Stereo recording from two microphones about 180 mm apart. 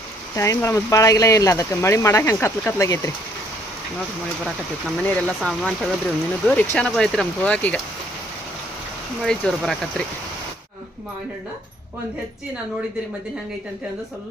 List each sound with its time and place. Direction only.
0.3 s speech: 15° left (ahead or behind)
5.0 s speech: 5° left (ahead or behind)
9.2 s speech: 5° left (ahead or behind)